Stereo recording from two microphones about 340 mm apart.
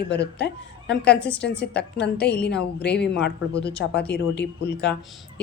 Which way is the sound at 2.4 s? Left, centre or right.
Centre.